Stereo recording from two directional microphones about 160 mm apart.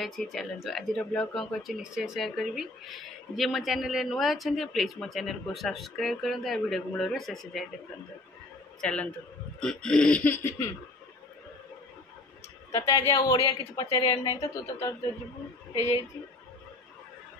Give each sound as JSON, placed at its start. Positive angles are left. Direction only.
{"t": 0.0, "sound": "speech", "side_deg": 0}
{"t": 8.8, "sound": "a man's voice", "side_deg": 5}
{"t": 13.0, "sound": "a woman's voice", "side_deg": 25}